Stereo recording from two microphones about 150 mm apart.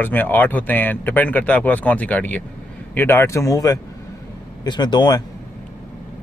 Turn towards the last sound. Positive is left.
turn(degrees=30)  # may be behind; listen again after turning